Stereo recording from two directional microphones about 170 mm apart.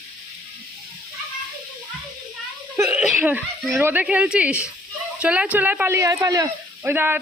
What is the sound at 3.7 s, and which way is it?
Speech, 10° right (ahead or behind).